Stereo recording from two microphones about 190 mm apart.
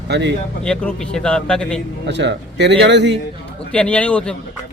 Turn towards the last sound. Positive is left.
turn(degrees=5)  # may be behind; listen again after turning